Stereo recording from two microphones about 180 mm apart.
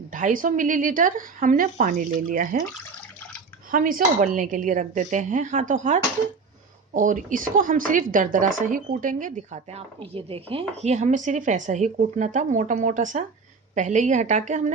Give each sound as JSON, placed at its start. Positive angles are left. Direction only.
{"t": 0.1, "sound": "a woman's voice", "side_deg": -45}
{"t": 3.7, "sound": "a woman's voice", "side_deg": -50}